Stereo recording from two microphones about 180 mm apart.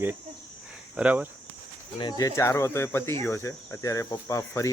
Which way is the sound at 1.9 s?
20° left (ahead or behind).